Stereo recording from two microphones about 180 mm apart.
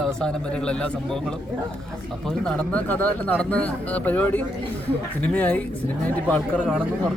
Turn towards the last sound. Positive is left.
turn(degrees=10)  # may be behind; listen again after turning